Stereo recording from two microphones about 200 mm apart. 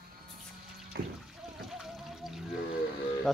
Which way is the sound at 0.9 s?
50° right (ahead or behind).